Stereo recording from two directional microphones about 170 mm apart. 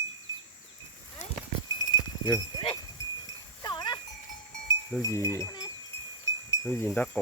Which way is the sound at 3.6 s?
25° left (ahead or behind).